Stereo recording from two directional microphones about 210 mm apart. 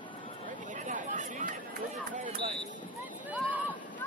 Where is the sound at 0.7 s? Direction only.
35° right (ahead or behind).